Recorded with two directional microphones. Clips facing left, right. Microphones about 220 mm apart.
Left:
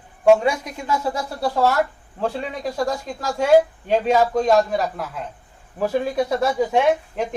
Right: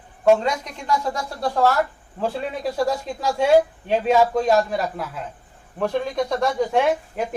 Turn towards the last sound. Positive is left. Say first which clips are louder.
# left 2 dB
turn(degrees=0)  # may be behind; listen again after turning